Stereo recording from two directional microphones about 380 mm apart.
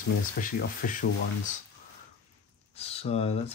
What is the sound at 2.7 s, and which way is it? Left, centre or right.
Speech, centre.